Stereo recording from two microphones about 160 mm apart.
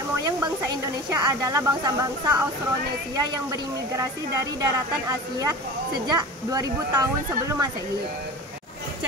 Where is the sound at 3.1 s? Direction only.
20° right (ahead or behind).